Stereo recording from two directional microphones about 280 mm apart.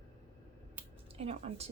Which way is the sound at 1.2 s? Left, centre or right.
Right.